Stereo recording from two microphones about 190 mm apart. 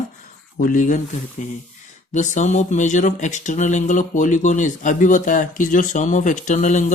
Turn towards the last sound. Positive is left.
turn(degrees=40)  # may be behind; listen again after turning